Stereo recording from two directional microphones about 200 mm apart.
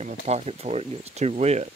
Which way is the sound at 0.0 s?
30° right (ahead or behind).